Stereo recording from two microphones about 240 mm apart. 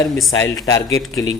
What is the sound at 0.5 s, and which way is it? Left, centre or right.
Speech, centre.